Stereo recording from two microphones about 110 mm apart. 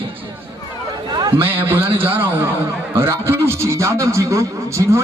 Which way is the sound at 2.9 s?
20° right (ahead or behind).